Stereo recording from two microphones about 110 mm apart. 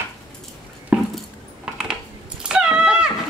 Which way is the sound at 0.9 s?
10° right (ahead or behind).